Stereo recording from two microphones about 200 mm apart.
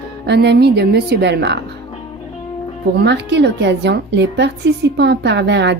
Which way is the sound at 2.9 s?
60° right (ahead or behind).